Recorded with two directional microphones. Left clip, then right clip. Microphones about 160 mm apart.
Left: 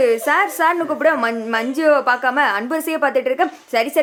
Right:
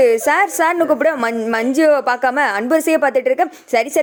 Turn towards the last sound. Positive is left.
turn(degrees=-35)  # may be behind; listen again after turning